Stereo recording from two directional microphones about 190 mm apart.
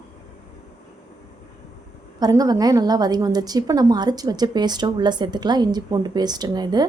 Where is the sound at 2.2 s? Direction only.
20° right (ahead or behind).